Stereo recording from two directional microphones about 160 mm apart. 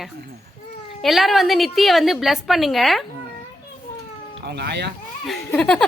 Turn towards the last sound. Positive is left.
turn(degrees=5)  # may be behind; listen again after turning